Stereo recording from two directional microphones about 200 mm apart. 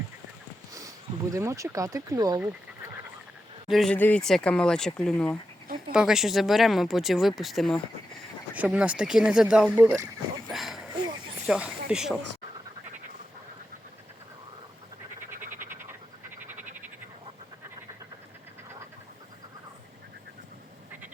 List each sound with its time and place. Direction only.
1.3 s speech: 15° right (ahead or behind)
3.7 s speech: centre (ahead or behind)
10.5 s a sound: centre (ahead or behind)
11.4 s speech: 5° right (ahead or behind)
15.3 s frog: 40° right (ahead or behind)
16.4 s frog: 10° right (ahead or behind)